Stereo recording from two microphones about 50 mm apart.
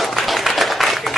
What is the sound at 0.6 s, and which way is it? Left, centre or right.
Applause, centre.